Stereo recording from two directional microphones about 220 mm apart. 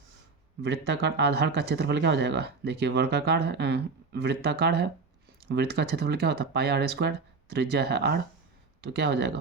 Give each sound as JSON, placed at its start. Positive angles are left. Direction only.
{"t": 0.6, "sound": "speech", "side_deg": -50}